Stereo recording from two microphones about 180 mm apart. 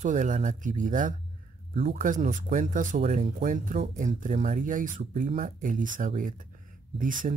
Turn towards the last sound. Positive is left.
turn(degrees=-50)  # may be behind; listen again after turning